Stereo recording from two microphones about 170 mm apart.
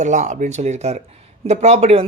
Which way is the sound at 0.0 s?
45° right (ahead or behind).